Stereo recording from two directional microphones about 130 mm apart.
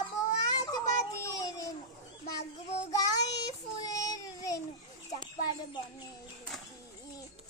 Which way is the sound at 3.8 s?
30° left (ahead or behind).